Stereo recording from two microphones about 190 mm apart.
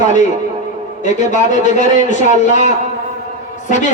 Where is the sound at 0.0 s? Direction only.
40° left (ahead or behind).